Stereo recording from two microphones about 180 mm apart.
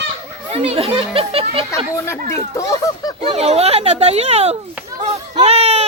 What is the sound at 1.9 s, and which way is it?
Speech, 15° left (ahead or behind).